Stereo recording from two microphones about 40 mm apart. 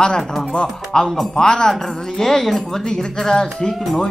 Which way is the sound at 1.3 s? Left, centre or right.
Centre.